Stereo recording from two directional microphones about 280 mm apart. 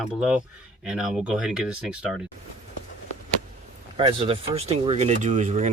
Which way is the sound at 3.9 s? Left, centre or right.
Centre.